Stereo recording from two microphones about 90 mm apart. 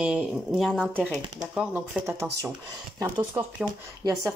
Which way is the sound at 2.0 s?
30° right (ahead or behind).